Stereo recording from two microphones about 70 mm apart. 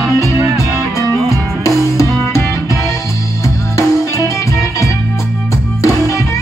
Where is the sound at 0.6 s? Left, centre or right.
Right.